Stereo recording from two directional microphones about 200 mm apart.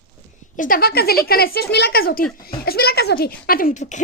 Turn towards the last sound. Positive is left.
turn(degrees=35)  # may be behind; listen again after turning